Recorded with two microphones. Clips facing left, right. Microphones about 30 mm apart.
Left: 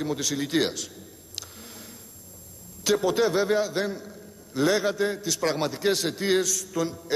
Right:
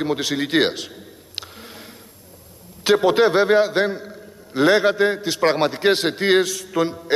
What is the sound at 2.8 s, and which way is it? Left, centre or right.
A man's voice, right.